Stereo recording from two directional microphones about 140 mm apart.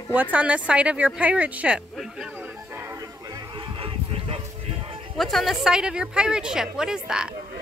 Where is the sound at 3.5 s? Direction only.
40° right (ahead or behind).